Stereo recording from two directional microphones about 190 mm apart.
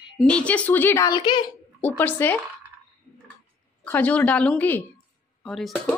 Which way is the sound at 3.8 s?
10° left (ahead or behind).